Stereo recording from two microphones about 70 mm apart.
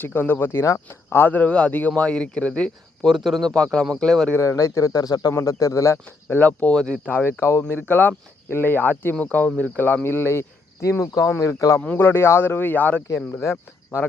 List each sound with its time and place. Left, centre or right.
0.0 s speech: left
3.1 s a man's voice: centre
4.4 s speech: left
5.3 s speech: left
6.1 s speech: left
6.7 s speech: centre
7.0 s speech: left
10.8 s speech: left
11.9 s speech: left
13.1 s speech: left